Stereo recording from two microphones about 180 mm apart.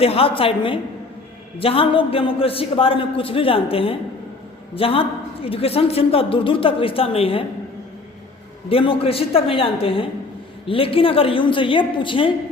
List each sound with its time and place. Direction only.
0.0 s a woman's voice: 30° left (ahead or behind)
8.7 s a woman's voice: 30° left (ahead or behind)